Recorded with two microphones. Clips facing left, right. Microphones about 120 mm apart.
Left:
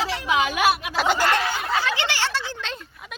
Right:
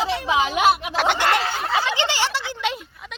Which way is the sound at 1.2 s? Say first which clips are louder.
Right 1 dB; 30° right (ahead or behind).